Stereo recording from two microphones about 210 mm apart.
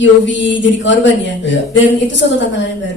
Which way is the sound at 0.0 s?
60° left (ahead or behind).